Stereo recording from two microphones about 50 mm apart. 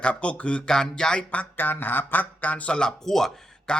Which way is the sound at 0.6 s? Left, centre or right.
Centre.